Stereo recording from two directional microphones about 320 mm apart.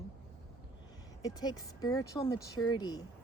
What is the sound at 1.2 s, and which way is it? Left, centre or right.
Speech, centre.